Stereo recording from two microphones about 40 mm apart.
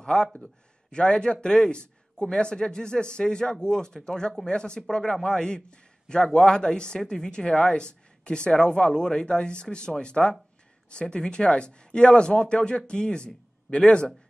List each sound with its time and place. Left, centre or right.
0.0 s speech: centre